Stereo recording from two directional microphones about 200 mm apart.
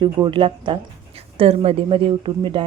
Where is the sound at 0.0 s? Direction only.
25° right (ahead or behind).